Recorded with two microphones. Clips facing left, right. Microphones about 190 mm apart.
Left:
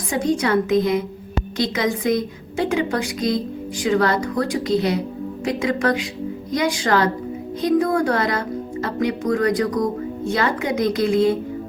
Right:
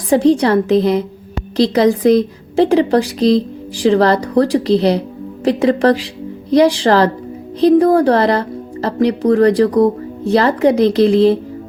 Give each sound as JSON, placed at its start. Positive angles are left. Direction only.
{"t": 0.1, "sound": "a woman's voice", "side_deg": -35}